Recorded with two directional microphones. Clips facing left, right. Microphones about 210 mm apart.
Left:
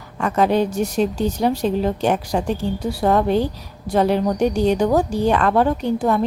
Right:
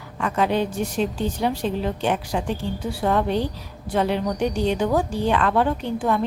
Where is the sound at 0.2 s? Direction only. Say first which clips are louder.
Left 4 dB; 45° left (ahead or behind).